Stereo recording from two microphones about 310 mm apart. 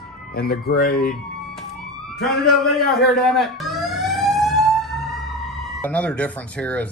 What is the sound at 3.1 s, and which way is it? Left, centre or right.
Emergency vehicle, centre.